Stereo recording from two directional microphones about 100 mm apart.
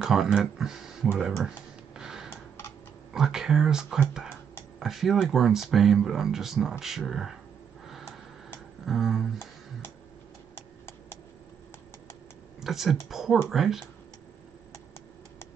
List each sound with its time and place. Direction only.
0.0 s speech: 5° right (ahead or behind)
2.0 s a sound: 5° right (ahead or behind)
2.2 s typing: 25° left (ahead or behind)
3.1 s speech: 5° right (ahead or behind)
8.8 s speech: 5° right (ahead or behind)
10.5 s a sound: 25° left (ahead or behind)
12.5 s speech: 5° right (ahead or behind)